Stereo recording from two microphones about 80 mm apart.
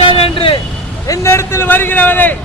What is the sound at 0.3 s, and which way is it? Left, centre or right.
Vehicle, left.